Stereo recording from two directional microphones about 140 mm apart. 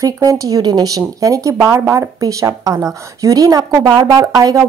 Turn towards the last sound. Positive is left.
turn(degrees=-25)  # may be behind; listen again after turning